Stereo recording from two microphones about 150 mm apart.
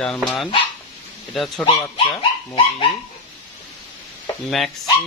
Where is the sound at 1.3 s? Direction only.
Centre (ahead or behind).